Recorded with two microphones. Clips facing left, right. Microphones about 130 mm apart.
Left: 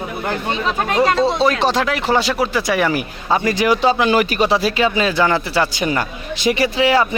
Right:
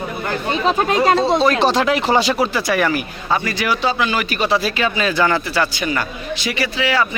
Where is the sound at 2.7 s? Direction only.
20° left (ahead or behind).